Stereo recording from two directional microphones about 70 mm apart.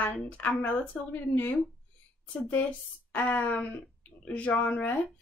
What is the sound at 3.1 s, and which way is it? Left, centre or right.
Speech, left.